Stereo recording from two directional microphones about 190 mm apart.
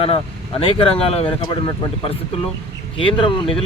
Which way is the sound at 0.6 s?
30° left (ahead or behind).